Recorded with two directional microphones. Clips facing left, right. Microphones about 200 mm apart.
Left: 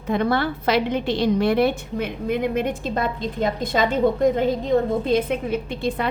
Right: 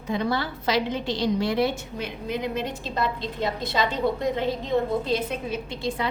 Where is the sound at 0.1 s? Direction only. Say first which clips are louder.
Left 5 dB; 55° left (ahead or behind).